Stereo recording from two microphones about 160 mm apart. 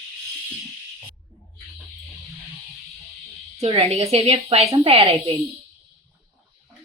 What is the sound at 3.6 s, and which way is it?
Speech, 40° right (ahead or behind).